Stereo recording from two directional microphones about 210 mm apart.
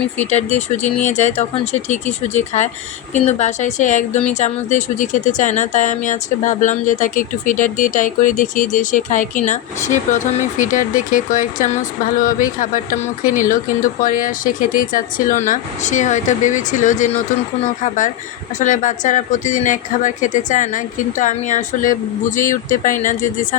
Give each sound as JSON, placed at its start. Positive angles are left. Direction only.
{"t": 0.2, "sound": "speech", "side_deg": 30}